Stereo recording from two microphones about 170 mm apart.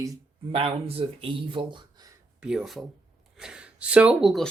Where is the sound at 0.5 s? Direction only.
35° right (ahead or behind).